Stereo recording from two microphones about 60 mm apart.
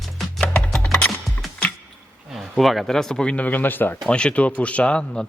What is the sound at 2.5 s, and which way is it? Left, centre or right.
Speech, centre.